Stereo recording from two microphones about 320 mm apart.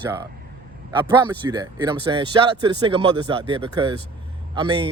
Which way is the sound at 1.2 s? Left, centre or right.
Centre.